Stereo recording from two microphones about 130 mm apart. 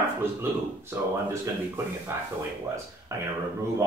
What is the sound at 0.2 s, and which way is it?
Speech, 20° right (ahead or behind).